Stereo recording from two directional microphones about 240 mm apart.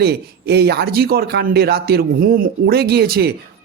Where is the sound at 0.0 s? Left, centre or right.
Right.